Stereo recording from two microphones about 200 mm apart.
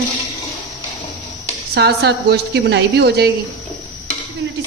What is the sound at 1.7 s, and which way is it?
Speech, 55° right (ahead or behind).